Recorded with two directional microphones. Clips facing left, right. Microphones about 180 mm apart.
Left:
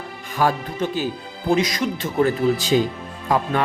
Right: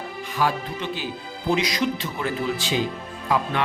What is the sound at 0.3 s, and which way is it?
Speech, 45° left (ahead or behind).